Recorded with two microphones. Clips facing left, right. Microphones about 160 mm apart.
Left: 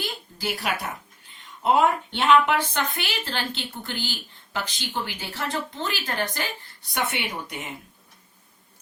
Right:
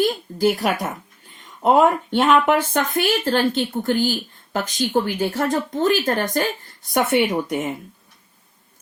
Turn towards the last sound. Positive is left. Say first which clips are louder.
# right 13 dB
turn(degrees=-45)  # may be behind; listen again after turning